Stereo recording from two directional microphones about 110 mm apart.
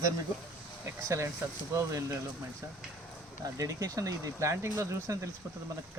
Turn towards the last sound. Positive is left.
turn(degrees=-25)  # may be behind; listen again after turning